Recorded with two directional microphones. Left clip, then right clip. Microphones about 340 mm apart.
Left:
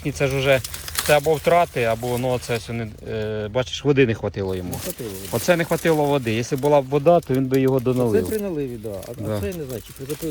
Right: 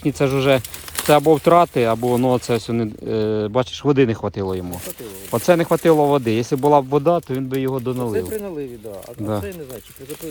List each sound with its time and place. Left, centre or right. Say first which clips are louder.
0.0 s speech: right 3 dB; centre